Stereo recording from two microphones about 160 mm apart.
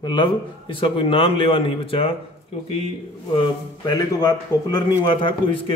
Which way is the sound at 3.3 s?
30° left (ahead or behind).